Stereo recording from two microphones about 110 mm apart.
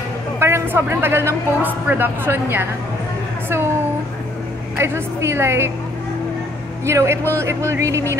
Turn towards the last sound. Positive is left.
turn(degrees=-25)  # may be behind; listen again after turning